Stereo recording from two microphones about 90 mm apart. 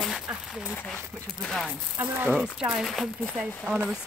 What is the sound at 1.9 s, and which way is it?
Speech, 20° right (ahead or behind).